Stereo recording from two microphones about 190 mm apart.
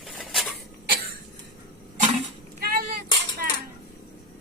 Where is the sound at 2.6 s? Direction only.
50° right (ahead or behind).